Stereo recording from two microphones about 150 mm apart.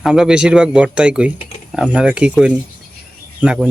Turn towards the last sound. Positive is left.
turn(degrees=-5)  # may be behind; listen again after turning